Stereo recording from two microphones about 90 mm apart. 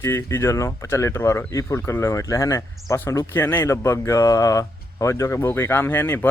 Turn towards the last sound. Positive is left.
turn(degrees=25)  # may be behind; listen again after turning